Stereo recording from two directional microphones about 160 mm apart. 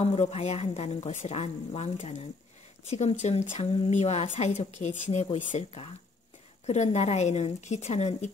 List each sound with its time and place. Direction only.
0.0 s a woman's voice: 40° left (ahead or behind)